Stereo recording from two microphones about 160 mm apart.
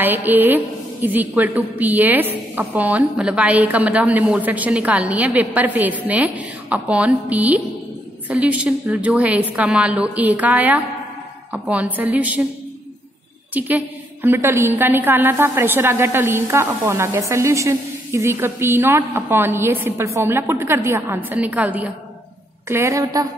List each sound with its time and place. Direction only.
0.0 s a woman's voice: 10° right (ahead or behind)
13.5 s a woman's voice: 10° right (ahead or behind)